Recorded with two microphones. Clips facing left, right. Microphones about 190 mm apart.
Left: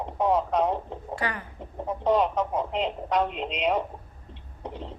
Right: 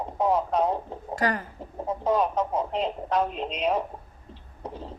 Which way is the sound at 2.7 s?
Centre (ahead or behind).